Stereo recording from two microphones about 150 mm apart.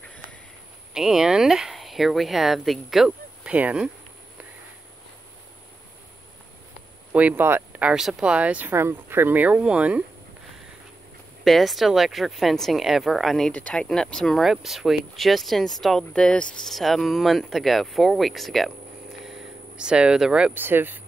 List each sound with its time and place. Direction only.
0.9 s speech: 5° right (ahead or behind)
7.1 s speech: 10° right (ahead or behind)
11.4 s speech: centre (ahead or behind)